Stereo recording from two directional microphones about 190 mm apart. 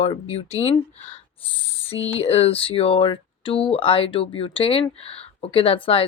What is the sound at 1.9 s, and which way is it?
Speech, 30° left (ahead or behind).